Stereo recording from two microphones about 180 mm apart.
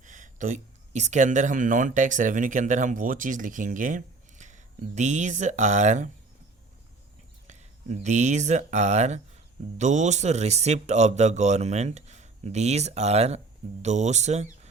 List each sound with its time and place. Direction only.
0.0 s speech: 45° right (ahead or behind)
7.4 s speech: 40° right (ahead or behind)